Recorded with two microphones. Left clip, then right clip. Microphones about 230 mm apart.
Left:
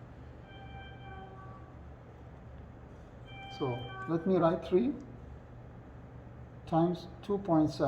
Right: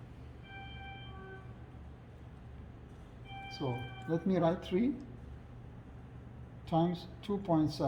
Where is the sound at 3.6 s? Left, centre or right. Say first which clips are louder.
Left 5 dB; right.